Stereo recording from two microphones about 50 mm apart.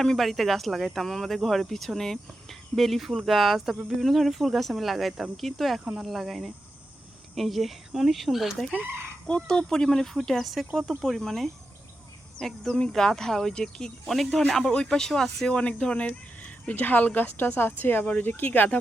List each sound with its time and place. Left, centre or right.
0.0 s speech: centre
9.2 s speech: centre
14.0 s speech: centre
14.7 s speech: centre
15.5 s speech: left
16.0 s speech: left